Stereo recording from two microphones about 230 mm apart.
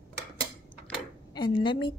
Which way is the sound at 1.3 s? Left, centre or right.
Centre.